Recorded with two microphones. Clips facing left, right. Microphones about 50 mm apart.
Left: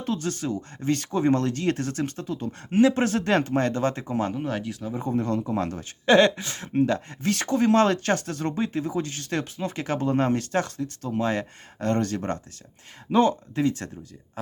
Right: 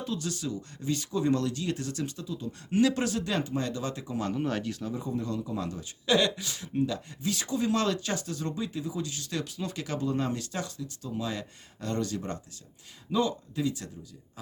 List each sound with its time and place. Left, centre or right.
0.0 s a man's voice: left
2.6 s a man's voice: left
4.4 s speech: centre
4.9 s a man's voice: left